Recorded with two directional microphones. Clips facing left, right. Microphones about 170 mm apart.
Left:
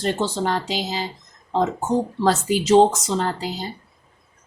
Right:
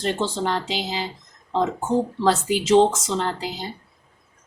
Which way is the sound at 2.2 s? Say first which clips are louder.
Left 1 dB; 40° left (ahead or behind).